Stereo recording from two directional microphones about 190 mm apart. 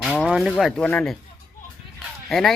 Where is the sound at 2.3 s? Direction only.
Centre (ahead or behind).